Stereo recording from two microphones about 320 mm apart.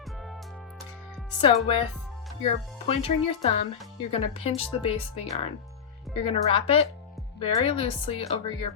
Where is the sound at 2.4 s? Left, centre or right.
Centre.